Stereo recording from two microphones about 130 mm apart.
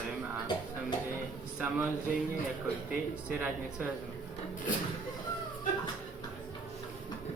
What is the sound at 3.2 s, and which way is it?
Speech, 10° right (ahead or behind).